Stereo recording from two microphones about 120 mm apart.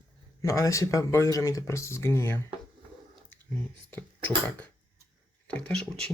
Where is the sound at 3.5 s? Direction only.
15° left (ahead or behind).